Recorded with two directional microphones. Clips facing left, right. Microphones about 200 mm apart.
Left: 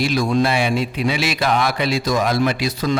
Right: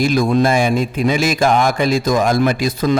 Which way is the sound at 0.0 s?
50° right (ahead or behind).